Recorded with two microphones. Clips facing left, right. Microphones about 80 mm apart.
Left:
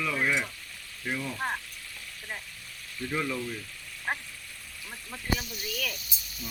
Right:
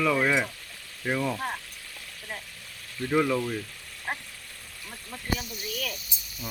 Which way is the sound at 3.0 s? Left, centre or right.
Right.